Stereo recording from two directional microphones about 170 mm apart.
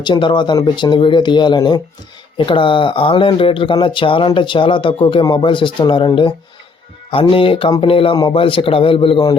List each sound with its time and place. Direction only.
0.0 s speech: 25° left (ahead or behind)